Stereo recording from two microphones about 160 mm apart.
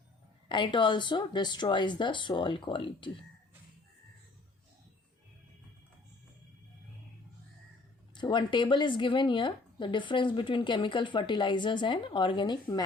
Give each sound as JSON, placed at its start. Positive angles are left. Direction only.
{"t": 0.4, "sound": "speech", "side_deg": 30}
{"t": 8.1, "sound": "speech", "side_deg": 30}